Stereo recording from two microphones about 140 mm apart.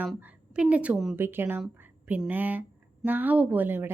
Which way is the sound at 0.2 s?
10° right (ahead or behind).